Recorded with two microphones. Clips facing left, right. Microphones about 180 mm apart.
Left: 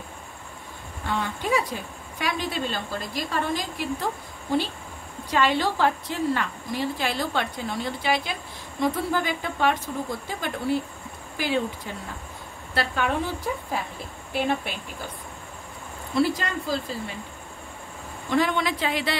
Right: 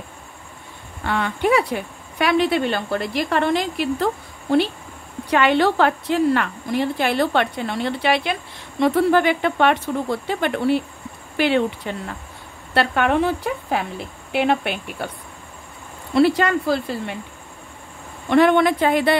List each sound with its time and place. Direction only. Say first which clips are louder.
1.0 s a woman's voice: right 7 dB; 70° right (ahead or behind)
16.2 s a woman's voice: right 8 dB; 70° right (ahead or behind)
18.3 s a woman's voice: right 9 dB; 60° right (ahead or behind)